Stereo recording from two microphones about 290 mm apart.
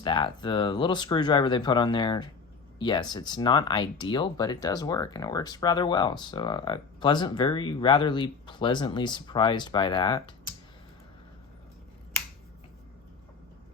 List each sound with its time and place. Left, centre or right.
0.0 s speech: centre